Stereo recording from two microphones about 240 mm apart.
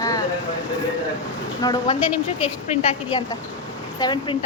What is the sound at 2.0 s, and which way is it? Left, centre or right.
Speech, centre.